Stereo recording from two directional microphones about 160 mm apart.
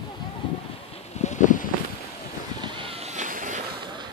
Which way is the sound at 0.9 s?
45° left (ahead or behind).